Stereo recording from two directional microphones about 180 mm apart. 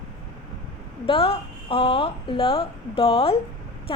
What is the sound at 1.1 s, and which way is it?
A woman's voice, 30° left (ahead or behind).